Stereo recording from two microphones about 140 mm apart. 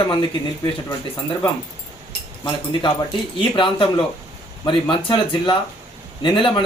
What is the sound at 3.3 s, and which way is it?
Speech, 40° left (ahead or behind).